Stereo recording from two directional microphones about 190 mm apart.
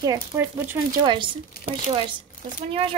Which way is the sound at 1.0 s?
25° right (ahead or behind).